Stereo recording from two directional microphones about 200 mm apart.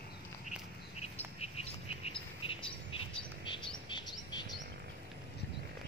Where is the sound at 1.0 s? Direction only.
30° left (ahead or behind).